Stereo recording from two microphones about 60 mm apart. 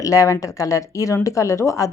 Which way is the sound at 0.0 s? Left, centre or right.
Left.